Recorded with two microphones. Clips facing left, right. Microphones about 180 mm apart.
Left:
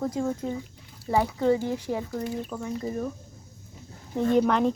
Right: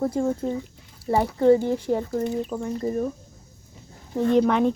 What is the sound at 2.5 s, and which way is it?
Speech, 15° right (ahead or behind).